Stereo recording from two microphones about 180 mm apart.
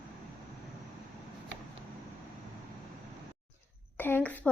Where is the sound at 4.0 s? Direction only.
10° left (ahead or behind).